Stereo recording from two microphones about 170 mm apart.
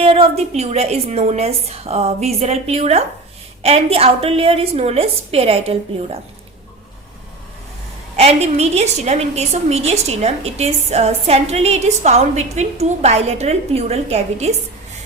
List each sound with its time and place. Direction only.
0.0 s a woman's voice: 35° right (ahead or behind)
8.1 s a woman's voice: 40° right (ahead or behind)